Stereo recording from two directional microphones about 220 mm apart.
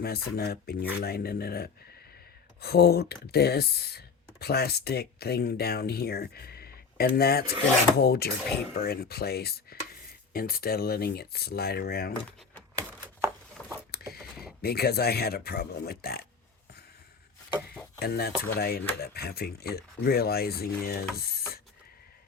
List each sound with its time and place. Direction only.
0.0 s speech: 45° left (ahead or behind)
13.6 s patter: 5° left (ahead or behind)
14.6 s speech: 45° left (ahead or behind)
18.0 s speech: 45° left (ahead or behind)